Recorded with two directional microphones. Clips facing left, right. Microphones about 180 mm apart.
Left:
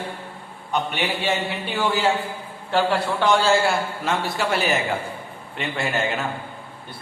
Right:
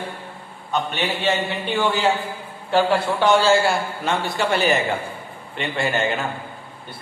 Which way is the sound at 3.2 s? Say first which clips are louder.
Right 2 dB; centre (ahead or behind).